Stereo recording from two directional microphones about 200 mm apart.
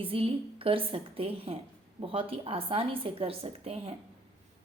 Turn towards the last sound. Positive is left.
turn(degrees=-30)  # may be behind; listen again after turning